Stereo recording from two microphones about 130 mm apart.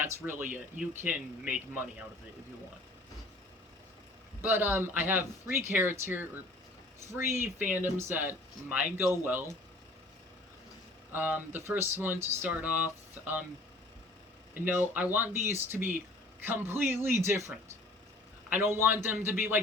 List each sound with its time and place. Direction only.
0.0 s speech: 15° right (ahead or behind)
4.4 s speech: 15° right (ahead or behind)
11.1 s speech: 15° right (ahead or behind)
14.5 s speech: 15° right (ahead or behind)
18.5 s speech: 20° right (ahead or behind)